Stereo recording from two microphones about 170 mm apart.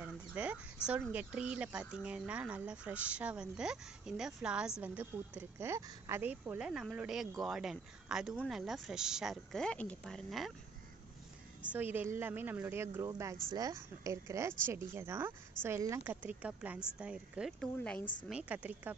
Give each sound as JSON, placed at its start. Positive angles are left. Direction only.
{"t": 0.0, "sound": "a sound", "side_deg": -5}
{"t": 1.1, "sound": "speech", "side_deg": -5}
{"t": 11.7, "sound": "speech", "side_deg": -10}
{"t": 18.3, "sound": "speech", "side_deg": -10}